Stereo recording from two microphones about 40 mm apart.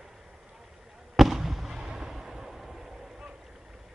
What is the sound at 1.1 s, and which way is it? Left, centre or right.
Fireworks, centre.